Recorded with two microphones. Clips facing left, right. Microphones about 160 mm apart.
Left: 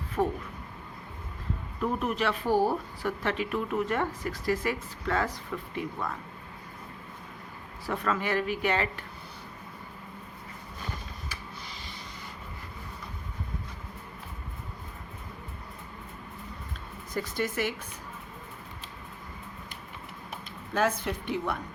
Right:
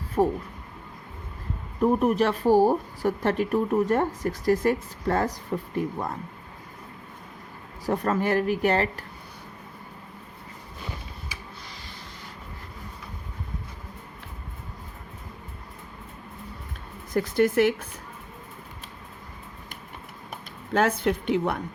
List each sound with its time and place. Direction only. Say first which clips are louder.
0.2 s speech: right 5 dB; 25° right (ahead or behind)
1.8 s speech: right 8 dB; 45° right (ahead or behind)
7.9 s speech: right 5 dB; 40° right (ahead or behind)
17.2 s a woman's voice: right 10 dB; 55° right (ahead or behind)
20.7 s a woman's voice: right 5 dB; 65° right (ahead or behind)